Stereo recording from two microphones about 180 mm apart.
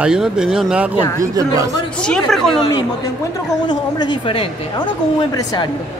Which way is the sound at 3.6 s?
25° left (ahead or behind).